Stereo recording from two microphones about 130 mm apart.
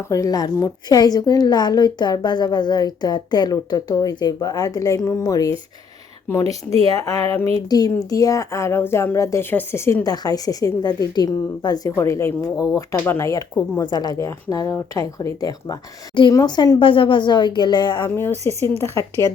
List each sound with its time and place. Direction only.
0.1 s a woman's voice: 25° left (ahead or behind)
6.5 s speech: 50° right (ahead or behind)
6.8 s a woman's voice: 25° left (ahead or behind)
18.1 s speech: 15° left (ahead or behind)